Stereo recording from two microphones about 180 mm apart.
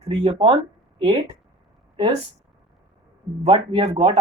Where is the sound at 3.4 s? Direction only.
35° right (ahead or behind).